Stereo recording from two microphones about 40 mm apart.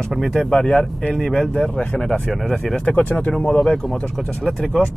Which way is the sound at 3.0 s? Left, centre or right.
Left.